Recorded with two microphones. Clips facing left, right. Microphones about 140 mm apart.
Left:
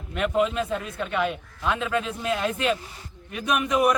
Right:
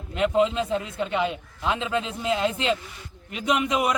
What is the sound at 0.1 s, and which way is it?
A man's voice, 20° right (ahead or behind).